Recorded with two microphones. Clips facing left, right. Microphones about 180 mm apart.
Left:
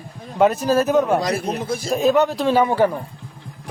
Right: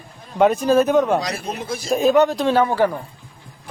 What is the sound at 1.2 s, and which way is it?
Speech, 55° left (ahead or behind).